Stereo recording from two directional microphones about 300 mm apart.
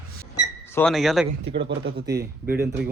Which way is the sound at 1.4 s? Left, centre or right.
Right.